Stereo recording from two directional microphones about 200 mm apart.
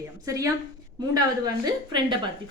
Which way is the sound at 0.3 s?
15° right (ahead or behind).